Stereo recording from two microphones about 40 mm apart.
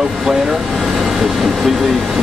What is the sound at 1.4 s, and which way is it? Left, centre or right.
Speech, centre.